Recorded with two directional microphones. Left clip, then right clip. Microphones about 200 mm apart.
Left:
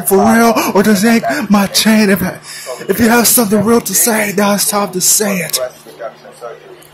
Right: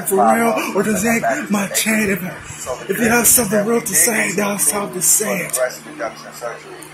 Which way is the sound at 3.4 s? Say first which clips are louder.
Left 5 dB; 20° left (ahead or behind).